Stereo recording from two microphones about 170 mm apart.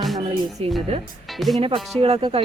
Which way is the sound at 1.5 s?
30° right (ahead or behind).